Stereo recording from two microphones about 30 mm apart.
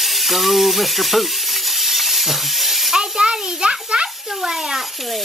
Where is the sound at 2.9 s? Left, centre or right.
Right.